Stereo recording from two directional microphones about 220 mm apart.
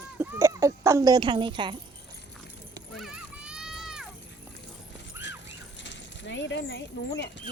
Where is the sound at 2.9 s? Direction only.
Centre (ahead or behind).